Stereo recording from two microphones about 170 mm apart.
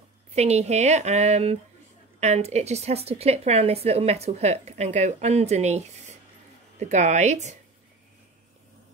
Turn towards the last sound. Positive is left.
turn(degrees=-45)  # may be behind; listen again after turning